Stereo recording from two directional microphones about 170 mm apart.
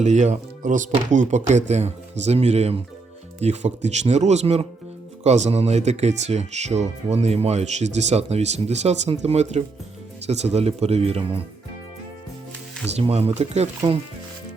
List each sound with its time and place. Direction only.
0.0 s speech: 45° right (ahead or behind)
13.0 s speech: 35° right (ahead or behind)